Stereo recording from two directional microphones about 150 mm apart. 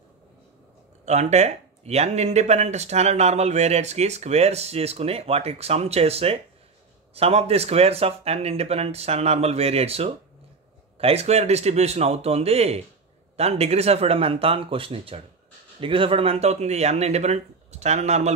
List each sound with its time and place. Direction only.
1.0 s speech: 50° right (ahead or behind)